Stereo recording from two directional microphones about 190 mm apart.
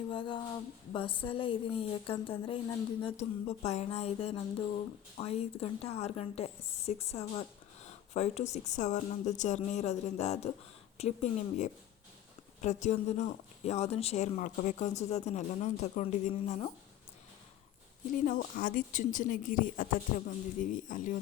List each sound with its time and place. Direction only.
0.1 s a woman's voice: 25° left (ahead or behind)
18.1 s speech: 45° left (ahead or behind)